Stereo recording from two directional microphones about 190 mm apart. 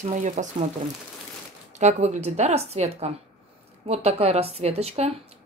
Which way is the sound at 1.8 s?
40° right (ahead or behind).